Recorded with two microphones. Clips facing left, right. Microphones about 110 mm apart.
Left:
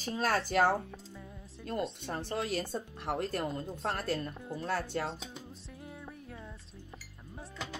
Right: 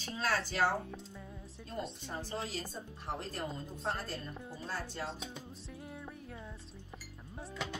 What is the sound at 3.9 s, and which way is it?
Speech, 70° left (ahead or behind).